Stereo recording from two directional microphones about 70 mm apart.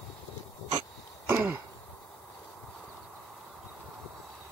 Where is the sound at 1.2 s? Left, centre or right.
Right.